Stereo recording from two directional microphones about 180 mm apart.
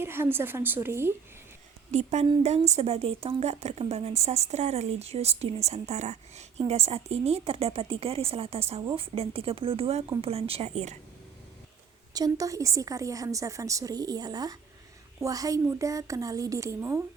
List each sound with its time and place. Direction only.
0.0 s a woman's voice: 15° right (ahead or behind)
1.9 s a woman's voice: 40° right (ahead or behind)
12.1 s a woman's voice: 20° right (ahead or behind)